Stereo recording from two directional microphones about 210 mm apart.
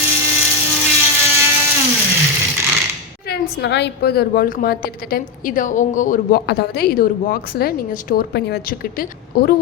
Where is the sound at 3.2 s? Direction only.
50° left (ahead or behind).